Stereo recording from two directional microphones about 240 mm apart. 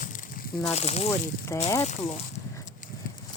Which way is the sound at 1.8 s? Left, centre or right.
Left.